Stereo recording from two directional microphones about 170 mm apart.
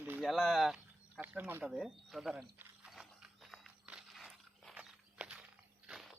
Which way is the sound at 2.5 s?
5° right (ahead or behind).